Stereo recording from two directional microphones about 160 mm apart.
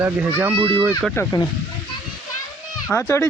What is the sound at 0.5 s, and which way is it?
Speech, 30° right (ahead or behind).